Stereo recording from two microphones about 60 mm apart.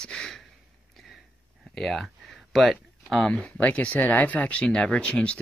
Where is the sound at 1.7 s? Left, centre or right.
Centre.